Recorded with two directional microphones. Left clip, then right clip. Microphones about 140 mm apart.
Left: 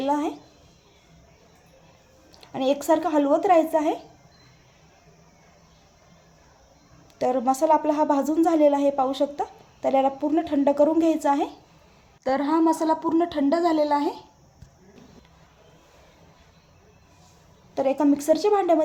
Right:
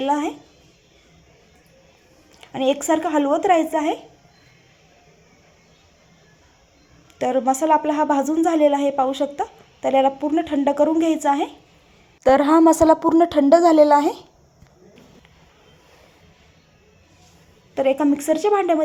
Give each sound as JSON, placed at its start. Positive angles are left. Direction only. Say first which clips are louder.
{"t": 0.1, "sound": "speech", "louder": "right 2 dB", "side_deg": -20}
{"t": 2.4, "sound": "speech", "louder": "right 3 dB", "side_deg": -15}
{"t": 7.2, "sound": "a woman's voice", "louder": "right 3 dB", "side_deg": -20}
{"t": 12.2, "sound": "a woman's voice", "louder": "right 8 dB", "side_deg": -55}
{"t": 17.7, "sound": "speech", "louder": "right 3 dB", "side_deg": -20}